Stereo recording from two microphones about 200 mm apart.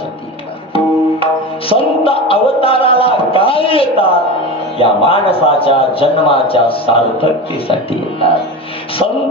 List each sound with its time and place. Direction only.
0.7 s music: 30° left (ahead or behind)
4.7 s a man's voice: 30° left (ahead or behind)